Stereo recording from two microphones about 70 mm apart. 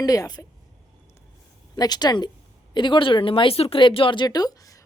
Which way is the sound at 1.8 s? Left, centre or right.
Left.